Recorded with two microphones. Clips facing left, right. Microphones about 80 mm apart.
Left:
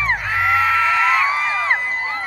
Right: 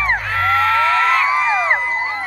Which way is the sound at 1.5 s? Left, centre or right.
Centre.